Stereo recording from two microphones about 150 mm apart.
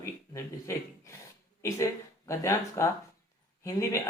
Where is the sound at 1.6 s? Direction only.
20° left (ahead or behind).